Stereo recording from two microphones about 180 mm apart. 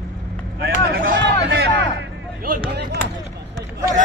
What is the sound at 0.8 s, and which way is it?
Speech, 55° right (ahead or behind).